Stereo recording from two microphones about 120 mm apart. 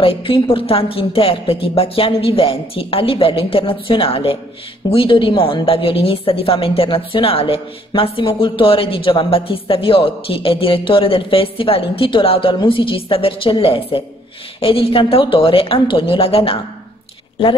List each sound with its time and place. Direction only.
0.0 s a woman's voice: 50° left (ahead or behind)